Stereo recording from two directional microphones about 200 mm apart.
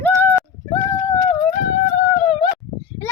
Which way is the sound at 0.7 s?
15° left (ahead or behind).